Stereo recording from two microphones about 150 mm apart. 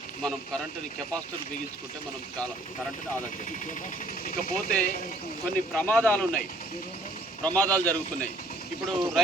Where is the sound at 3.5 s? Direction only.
60° left (ahead or behind).